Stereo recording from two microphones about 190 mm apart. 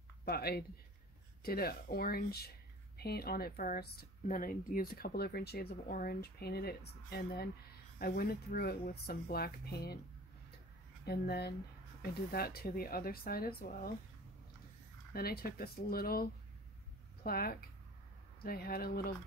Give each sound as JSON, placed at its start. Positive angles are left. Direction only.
{"t": 0.2, "sound": "speech", "side_deg": 55}
{"t": 11.1, "sound": "speech", "side_deg": 55}
{"t": 15.1, "sound": "speech", "side_deg": 55}